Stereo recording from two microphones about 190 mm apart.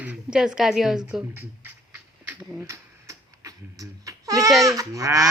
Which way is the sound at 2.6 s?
15° right (ahead or behind).